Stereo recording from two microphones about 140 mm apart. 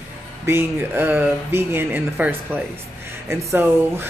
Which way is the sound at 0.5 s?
15° right (ahead or behind).